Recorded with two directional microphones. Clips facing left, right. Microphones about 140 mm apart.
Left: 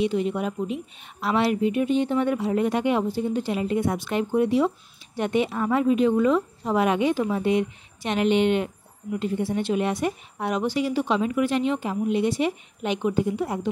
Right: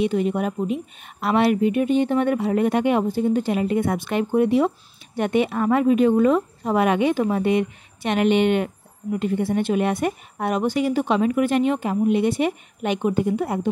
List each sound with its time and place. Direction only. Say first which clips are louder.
0.0 s a woman's voice: right 3 dB; 50° right (ahead or behind)